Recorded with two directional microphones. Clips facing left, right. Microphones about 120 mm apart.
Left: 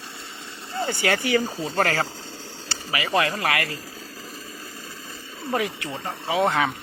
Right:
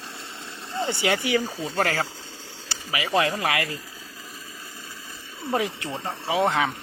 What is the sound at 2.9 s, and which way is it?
Speech, 15° right (ahead or behind).